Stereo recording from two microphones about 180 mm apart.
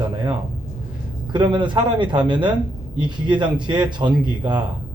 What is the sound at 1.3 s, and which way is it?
Speech, 25° right (ahead or behind).